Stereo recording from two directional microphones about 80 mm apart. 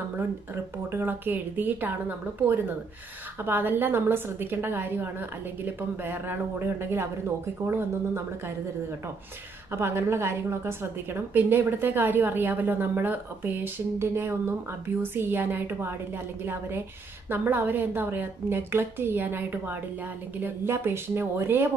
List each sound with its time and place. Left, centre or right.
0.8 s a woman's voice: right
9.7 s a woman's voice: right